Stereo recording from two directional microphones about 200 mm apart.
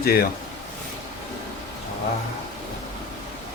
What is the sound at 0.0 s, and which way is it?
Speech, 50° left (ahead or behind).